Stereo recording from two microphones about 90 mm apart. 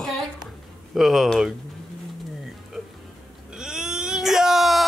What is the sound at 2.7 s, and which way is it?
Music, 5° right (ahead or behind).